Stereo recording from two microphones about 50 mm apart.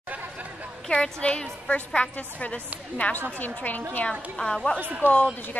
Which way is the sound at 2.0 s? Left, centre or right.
Left.